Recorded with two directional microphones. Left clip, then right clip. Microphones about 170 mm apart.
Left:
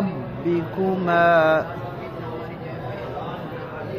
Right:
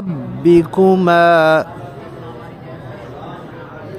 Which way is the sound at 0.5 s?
75° right (ahead or behind).